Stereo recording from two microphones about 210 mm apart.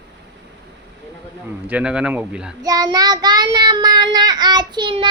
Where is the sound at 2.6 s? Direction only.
20° right (ahead or behind).